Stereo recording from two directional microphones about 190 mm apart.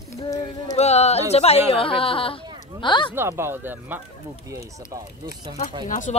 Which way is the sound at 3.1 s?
15° right (ahead or behind).